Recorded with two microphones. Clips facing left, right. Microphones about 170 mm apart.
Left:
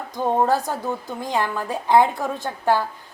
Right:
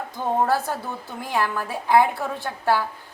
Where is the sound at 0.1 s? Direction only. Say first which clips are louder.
Left 3 dB; 15° left (ahead or behind).